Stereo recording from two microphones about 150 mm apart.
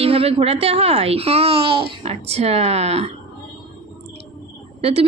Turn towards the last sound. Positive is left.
turn(degrees=-40)  # may be behind; listen again after turning